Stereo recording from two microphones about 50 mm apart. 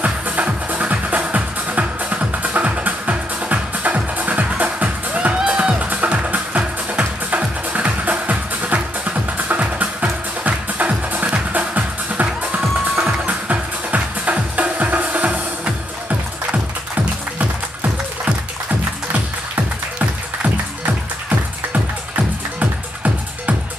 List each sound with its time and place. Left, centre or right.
0.0 s music: right
19.5 s music: right